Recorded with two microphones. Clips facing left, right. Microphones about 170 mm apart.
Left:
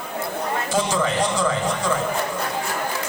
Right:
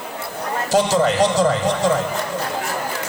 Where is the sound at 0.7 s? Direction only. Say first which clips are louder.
Right 7 dB; 40° right (ahead or behind).